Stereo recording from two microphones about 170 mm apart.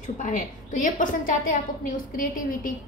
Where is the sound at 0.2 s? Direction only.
50° left (ahead or behind).